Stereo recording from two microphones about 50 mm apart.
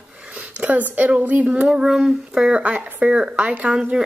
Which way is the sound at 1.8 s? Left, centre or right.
Centre.